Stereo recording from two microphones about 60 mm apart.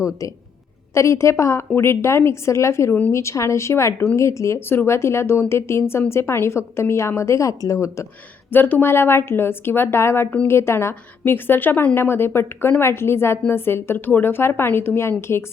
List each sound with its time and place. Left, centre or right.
0.9 s a woman's voice: left
1.7 s a woman's voice: left
8.5 s a woman's voice: left
8.9 s a woman's voice: left